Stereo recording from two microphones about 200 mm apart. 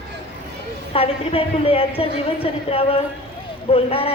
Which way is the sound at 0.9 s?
30° left (ahead or behind).